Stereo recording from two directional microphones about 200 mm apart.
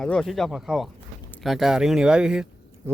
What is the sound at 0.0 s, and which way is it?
Speech, centre (ahead or behind).